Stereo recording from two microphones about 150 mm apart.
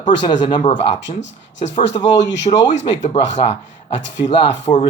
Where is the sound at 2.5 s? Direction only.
40° left (ahead or behind).